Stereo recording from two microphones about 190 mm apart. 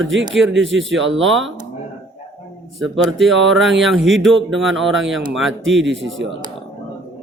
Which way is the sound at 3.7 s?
90° right.